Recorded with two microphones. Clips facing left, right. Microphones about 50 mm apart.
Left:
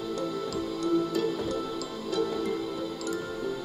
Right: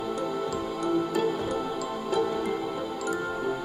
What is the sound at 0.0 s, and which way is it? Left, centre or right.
Music, right.